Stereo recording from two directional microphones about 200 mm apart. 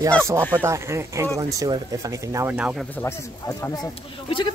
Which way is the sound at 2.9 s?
10° left (ahead or behind).